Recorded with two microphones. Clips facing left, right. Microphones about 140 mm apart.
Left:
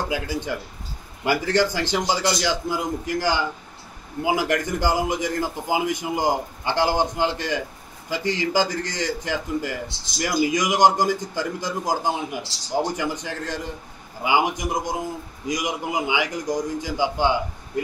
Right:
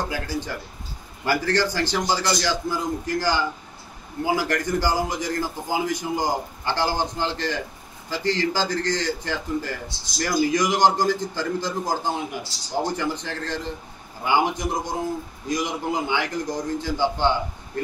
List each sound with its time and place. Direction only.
0.1 s a man's voice: 15° left (ahead or behind)